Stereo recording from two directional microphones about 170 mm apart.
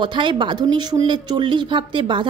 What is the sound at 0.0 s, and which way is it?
Speech, 25° right (ahead or behind).